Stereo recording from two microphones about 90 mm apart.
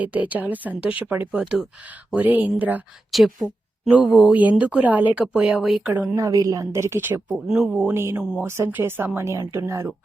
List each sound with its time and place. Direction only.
0.0 s speech: 20° right (ahead or behind)
1.3 s speech: 10° right (ahead or behind)
2.1 s speech: 20° right (ahead or behind)
3.1 s a woman's voice: centre (ahead or behind)
4.0 s speech: 10° right (ahead or behind)
5.4 s speech: 5° right (ahead or behind)
5.9 s speech: 20° right (ahead or behind)
6.1 s a woman's voice: 40° right (ahead or behind)
7.4 s speech: 5° right (ahead or behind)
7.7 s speech: 20° right (ahead or behind)